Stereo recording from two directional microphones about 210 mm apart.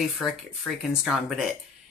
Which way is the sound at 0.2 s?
Centre (ahead or behind).